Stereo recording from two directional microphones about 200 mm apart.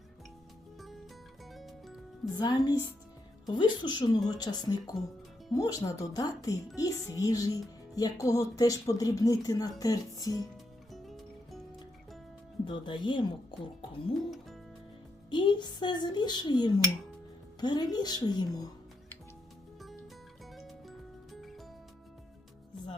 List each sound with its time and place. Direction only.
0.8 s music: centre (ahead or behind)
2.3 s a child's voice: 20° left (ahead or behind)
10.9 s music: centre (ahead or behind)
12.6 s a child's voice: 25° left (ahead or behind)
14.3 s music: centre (ahead or behind)
15.3 s a child's voice: 25° left (ahead or behind)
20.5 s music: centre (ahead or behind)